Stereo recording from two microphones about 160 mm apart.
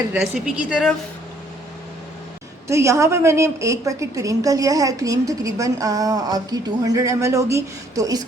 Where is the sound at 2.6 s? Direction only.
20° right (ahead or behind).